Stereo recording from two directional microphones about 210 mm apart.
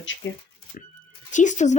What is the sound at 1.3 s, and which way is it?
Speech, 35° left (ahead or behind).